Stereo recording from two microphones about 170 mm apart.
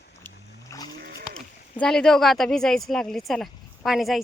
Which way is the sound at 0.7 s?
20° left (ahead or behind).